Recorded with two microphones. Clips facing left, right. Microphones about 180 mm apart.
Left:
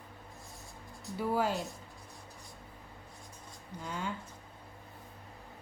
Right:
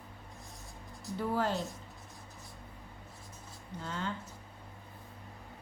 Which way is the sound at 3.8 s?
10° left (ahead or behind).